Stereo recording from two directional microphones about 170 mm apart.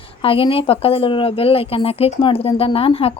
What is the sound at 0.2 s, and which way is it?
Speech, 35° left (ahead or behind).